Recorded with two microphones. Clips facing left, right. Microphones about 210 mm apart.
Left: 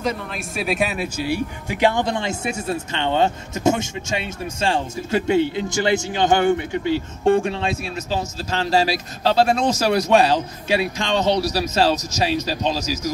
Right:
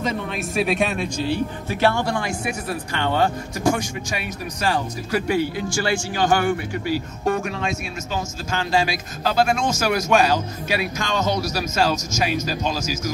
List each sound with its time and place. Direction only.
0.0 s speech: centre (ahead or behind); by 13.1 s 35° left (ahead or behind)